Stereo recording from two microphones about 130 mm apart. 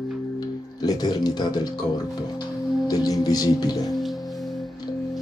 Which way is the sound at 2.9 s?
30° left (ahead or behind).